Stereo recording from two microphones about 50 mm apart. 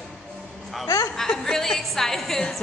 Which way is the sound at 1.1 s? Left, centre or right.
Centre.